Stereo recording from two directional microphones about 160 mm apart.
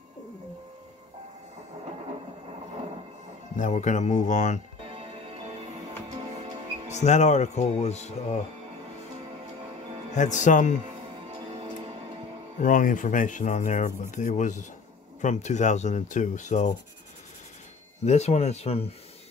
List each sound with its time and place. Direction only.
3.5 s speech: 50° left (ahead or behind)
6.0 s music: 45° right (ahead or behind)
6.9 s speech: 45° left (ahead or behind)
10.1 s speech: 50° left (ahead or behind)
11.3 s music: 40° right (ahead or behind)
12.5 s speech: 55° left (ahead or behind)
18.0 s speech: 45° left (ahead or behind)